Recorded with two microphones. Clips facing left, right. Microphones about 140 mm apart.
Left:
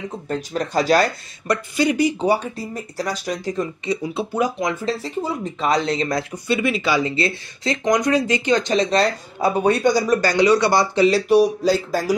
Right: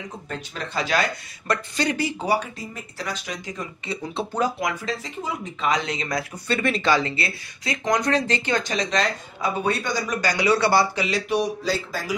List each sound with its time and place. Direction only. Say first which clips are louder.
0.5 s speech: left 8 dB; 40° left (ahead or behind)
1.5 s speech: left 5 dB; 15° left (ahead or behind)
2.5 s speech: left 8 dB; 40° left (ahead or behind)
3.8 s speech: left 5 dB; 15° left (ahead or behind)
4.6 s speech: left 4 dB; 25° left (ahead or behind)
6.3 s speech: left 3 dB; 10° left (ahead or behind)
8.7 s speech: left 6 dB; 35° left (ahead or behind)
10.4 s speech: left 1 dB; 15° left (ahead or behind)
11.0 s speech: left 9 dB; 35° left (ahead or behind)